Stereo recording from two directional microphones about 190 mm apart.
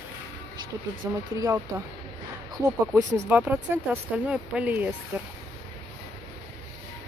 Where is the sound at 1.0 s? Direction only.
15° right (ahead or behind).